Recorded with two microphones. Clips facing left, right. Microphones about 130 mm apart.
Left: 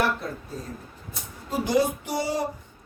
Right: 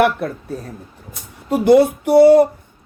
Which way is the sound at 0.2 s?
65° right (ahead or behind).